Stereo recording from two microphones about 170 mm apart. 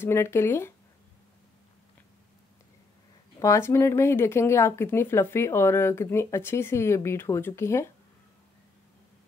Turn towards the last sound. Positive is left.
turn(degrees=15)  # may be behind; listen again after turning